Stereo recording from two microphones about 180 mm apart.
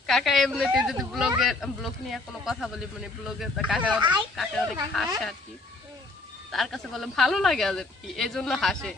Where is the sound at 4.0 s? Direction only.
25° right (ahead or behind).